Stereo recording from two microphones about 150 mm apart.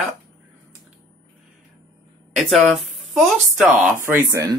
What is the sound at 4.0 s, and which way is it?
Speech, 15° right (ahead or behind).